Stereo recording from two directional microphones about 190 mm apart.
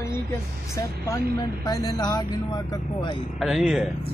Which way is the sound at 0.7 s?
15° left (ahead or behind).